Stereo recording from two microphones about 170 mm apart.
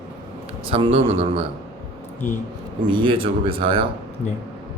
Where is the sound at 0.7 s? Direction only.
35° right (ahead or behind).